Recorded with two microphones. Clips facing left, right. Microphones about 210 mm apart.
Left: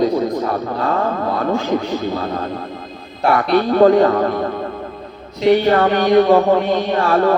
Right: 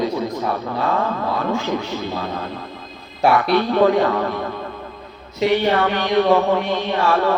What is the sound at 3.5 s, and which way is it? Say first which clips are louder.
A man's voice: left 8 dB; 45° left (ahead or behind).